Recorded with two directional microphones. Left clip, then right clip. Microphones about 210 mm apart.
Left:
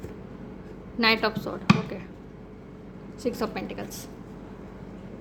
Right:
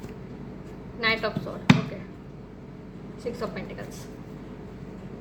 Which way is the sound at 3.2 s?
55° left (ahead or behind).